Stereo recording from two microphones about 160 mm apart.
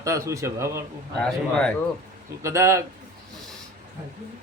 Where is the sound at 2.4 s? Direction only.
20° right (ahead or behind).